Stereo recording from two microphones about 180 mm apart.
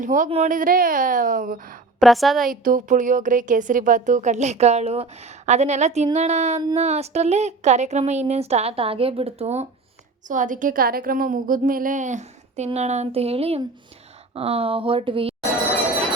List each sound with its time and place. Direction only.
0.0 s a woman's voice: 45° right (ahead or behind)
2.0 s a woman's voice: centre (ahead or behind)
2.5 s a woman's voice: 45° right (ahead or behind); by 15.4 s 30° right (ahead or behind)